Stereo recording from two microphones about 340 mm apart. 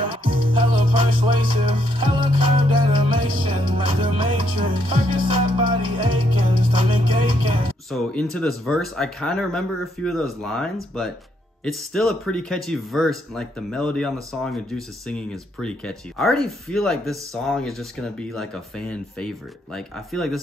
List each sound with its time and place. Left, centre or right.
0.2 s music: right
0.6 s music: centre
7.9 s speech: centre